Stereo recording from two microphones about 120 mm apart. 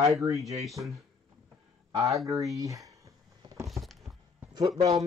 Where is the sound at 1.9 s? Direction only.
25° right (ahead or behind).